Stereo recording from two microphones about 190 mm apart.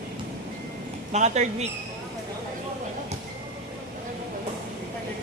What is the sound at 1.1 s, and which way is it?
Speech, 40° right (ahead or behind).